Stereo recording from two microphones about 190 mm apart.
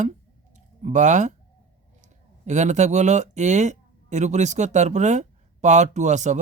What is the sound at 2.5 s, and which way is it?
A man's voice, 40° right (ahead or behind).